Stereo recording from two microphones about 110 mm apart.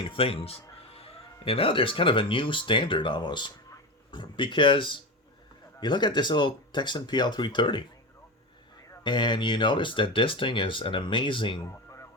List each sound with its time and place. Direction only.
0.0 s speech: 55° left (ahead or behind)
9.0 s speech: 45° left (ahead or behind)
11.6 s music: 25° left (ahead or behind)